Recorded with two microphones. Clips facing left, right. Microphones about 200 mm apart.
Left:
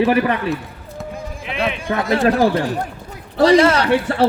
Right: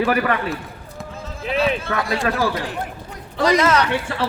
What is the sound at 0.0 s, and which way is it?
Speech, 25° left (ahead or behind).